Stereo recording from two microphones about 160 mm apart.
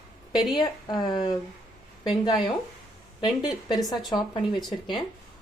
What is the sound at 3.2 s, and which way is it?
Speech, 25° left (ahead or behind).